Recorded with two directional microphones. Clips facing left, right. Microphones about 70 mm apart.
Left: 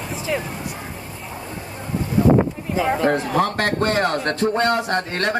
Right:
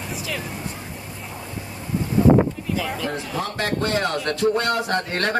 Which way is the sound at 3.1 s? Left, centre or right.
Left.